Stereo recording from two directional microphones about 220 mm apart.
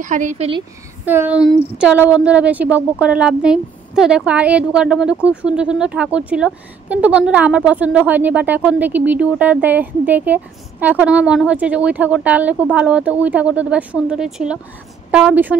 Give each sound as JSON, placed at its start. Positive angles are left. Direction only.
{"t": 0.0, "sound": "a woman's voice", "side_deg": -35}
{"t": 1.0, "sound": "a woman's voice", "side_deg": -10}